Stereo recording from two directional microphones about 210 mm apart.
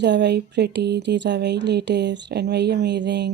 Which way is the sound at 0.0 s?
55° right (ahead or behind).